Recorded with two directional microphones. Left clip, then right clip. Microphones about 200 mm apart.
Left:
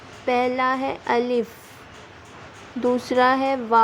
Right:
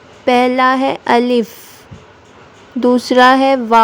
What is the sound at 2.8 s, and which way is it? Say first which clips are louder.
A woman's voice: right 10 dB; 30° right (ahead or behind).